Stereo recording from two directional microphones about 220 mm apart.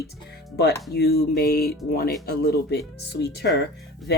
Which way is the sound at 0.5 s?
50° left (ahead or behind).